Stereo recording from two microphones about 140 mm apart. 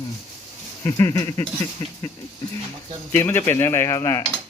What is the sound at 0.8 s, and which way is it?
Speech, 25° left (ahead or behind).